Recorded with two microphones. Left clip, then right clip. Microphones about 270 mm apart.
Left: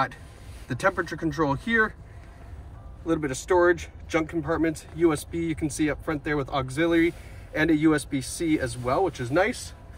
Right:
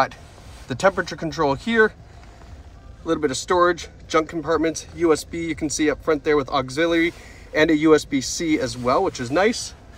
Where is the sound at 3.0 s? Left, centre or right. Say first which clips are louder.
Right 4 dB; centre.